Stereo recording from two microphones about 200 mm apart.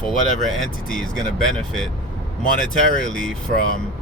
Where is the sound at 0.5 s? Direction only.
Centre (ahead or behind).